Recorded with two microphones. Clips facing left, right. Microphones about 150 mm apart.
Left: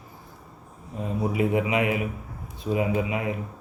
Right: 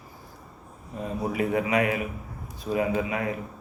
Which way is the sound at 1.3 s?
20° left (ahead or behind).